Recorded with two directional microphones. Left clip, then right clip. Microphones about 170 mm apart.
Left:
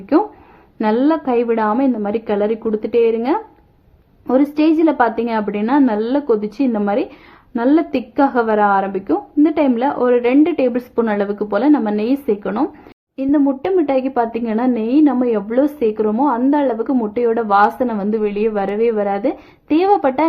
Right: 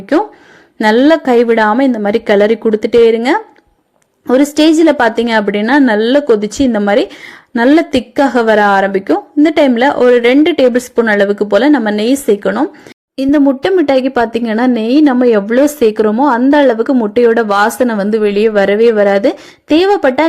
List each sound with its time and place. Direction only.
0.8 s a woman's voice: 30° right (ahead or behind)